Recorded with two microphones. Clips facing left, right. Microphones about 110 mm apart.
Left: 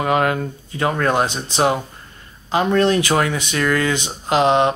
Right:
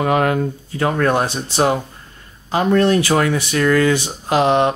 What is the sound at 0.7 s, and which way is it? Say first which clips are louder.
Speech: right 1 dB; 20° left (ahead or behind).